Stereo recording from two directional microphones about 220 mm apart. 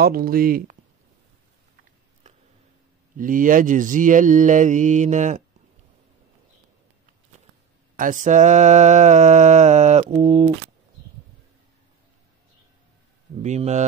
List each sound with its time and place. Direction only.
0.0 s mantra: 40° right (ahead or behind)
3.2 s mantra: 35° right (ahead or behind)
7.9 s mantra: 35° right (ahead or behind)
13.4 s mantra: 30° right (ahead or behind)